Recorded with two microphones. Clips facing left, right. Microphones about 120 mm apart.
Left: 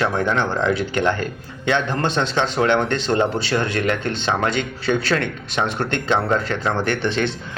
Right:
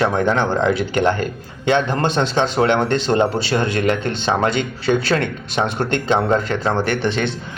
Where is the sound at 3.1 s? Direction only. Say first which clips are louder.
Right 1 dB; 15° right (ahead or behind).